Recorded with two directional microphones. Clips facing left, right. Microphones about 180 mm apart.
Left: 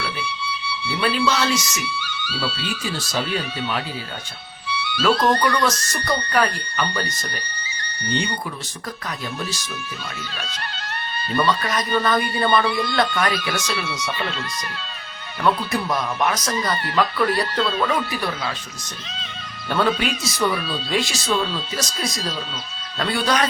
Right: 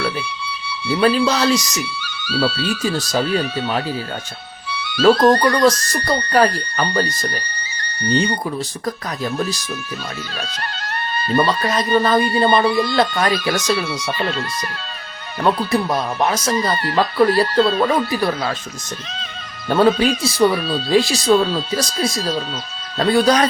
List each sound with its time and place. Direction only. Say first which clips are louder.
0.9 s speech: right 6 dB; 40° right (ahead or behind)
10.6 s music: right 5 dB; 40° right (ahead or behind)
11.6 s speech: right 5 dB; 25° right (ahead or behind)
11.9 s speech: right 5 dB; 40° right (ahead or behind)
16.7 s speech: right 4 dB; 40° right (ahead or behind)
19.6 s speech: right 7 dB; 35° right (ahead or behind)